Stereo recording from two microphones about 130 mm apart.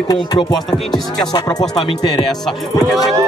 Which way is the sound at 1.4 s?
30° left (ahead or behind).